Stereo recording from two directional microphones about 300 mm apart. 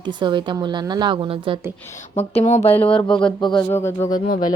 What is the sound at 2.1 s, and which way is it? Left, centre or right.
Speech, left.